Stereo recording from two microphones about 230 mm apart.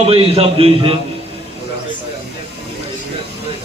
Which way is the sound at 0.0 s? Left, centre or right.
Right.